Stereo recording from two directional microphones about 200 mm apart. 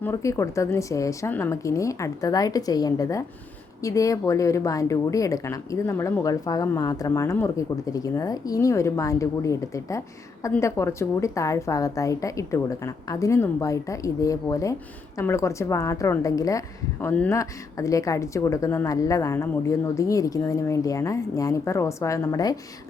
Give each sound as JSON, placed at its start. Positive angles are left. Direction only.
{"t": 0.0, "sound": "a woman's voice", "side_deg": 15}